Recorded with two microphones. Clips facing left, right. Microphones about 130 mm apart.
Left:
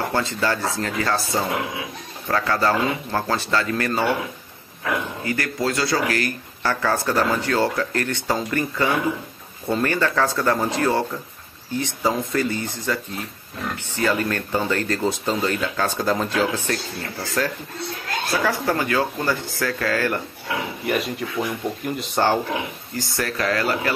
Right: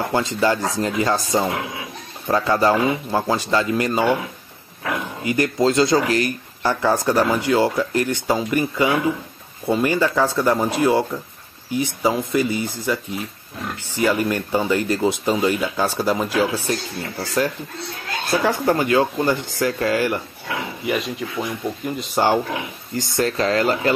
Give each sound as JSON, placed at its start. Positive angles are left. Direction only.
{"t": 0.1, "sound": "speech", "side_deg": -15}
{"t": 5.2, "sound": "speech", "side_deg": -20}
{"t": 20.8, "sound": "speech", "side_deg": 0}
{"t": 22.9, "sound": "speech", "side_deg": -25}